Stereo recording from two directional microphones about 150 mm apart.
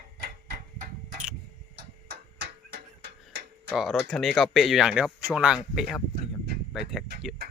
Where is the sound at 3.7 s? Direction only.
Centre (ahead or behind).